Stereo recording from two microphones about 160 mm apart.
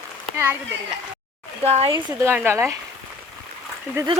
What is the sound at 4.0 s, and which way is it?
Speech, 20° right (ahead or behind).